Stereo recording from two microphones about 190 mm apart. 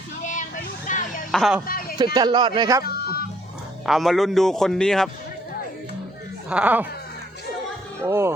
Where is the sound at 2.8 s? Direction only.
55° left (ahead or behind).